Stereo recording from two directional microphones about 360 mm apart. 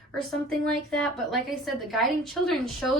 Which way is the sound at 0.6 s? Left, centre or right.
Centre.